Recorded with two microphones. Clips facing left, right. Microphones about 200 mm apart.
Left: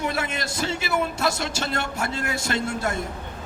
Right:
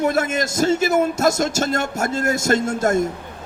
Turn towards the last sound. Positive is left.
turn(degrees=-45)  # may be behind; listen again after turning